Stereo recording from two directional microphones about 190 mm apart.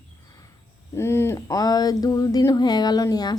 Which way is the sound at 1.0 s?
15° left (ahead or behind).